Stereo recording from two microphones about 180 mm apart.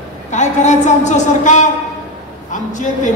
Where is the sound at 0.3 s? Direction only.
40° left (ahead or behind).